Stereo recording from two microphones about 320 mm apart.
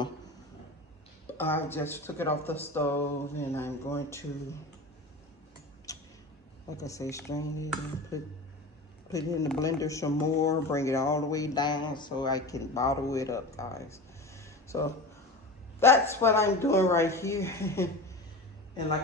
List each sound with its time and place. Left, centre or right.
1.3 s speech: centre
5.9 s tick-tock: centre
6.8 s speech: centre
13.5 s a sound: centre
15.8 s speech: centre